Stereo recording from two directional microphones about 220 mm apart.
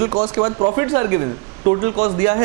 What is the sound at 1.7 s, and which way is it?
Speech, 30° right (ahead or behind).